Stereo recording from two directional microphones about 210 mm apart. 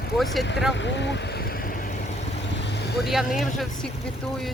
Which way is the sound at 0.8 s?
60° left (ahead or behind).